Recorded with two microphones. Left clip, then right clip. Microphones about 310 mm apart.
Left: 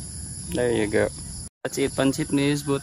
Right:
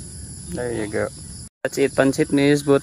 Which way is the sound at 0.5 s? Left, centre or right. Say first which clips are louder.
Left 3 dB; centre.